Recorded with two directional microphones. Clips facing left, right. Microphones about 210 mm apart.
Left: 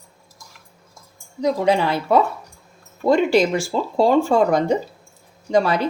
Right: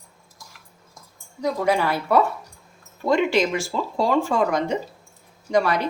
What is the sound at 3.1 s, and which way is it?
A woman's voice, 35° left (ahead or behind).